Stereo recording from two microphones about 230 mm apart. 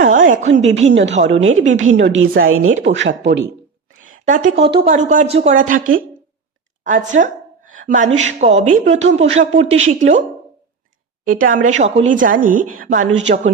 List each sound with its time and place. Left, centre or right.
0.0 s a woman's voice: right
1.8 s a woman's voice: right
4.0 s a woman's voice: right
6.8 s a woman's voice: right
11.3 s a woman's voice: right